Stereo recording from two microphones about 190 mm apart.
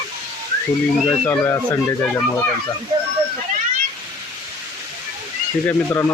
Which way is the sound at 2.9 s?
20° right (ahead or behind).